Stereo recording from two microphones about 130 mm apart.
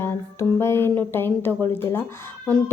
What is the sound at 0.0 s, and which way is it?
A woman's voice, 20° left (ahead or behind).